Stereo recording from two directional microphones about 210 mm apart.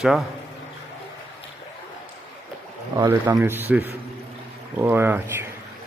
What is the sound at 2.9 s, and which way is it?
Speech, 15° right (ahead or behind).